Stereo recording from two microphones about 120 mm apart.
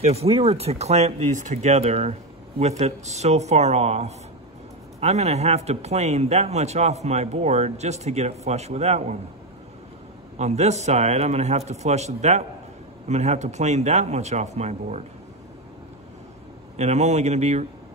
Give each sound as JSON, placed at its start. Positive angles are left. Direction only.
{"t": 0.1, "sound": "a man's voice", "side_deg": -60}
{"t": 10.3, "sound": "a man's voice", "side_deg": -65}
{"t": 16.7, "sound": "a man's voice", "side_deg": -70}